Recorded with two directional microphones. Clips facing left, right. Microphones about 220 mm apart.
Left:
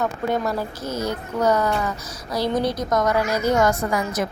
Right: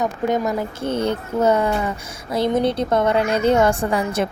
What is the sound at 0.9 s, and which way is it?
A woman's voice, 30° right (ahead or behind).